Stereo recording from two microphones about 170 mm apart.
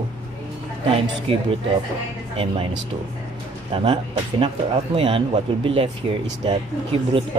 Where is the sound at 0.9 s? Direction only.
35° right (ahead or behind).